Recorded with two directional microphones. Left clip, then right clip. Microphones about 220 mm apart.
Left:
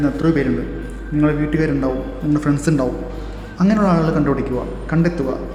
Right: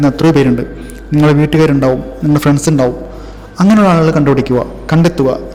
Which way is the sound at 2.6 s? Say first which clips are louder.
Right 7 dB; 25° right (ahead or behind).